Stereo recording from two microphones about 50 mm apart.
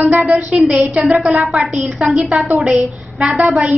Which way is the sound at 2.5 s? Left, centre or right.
Centre.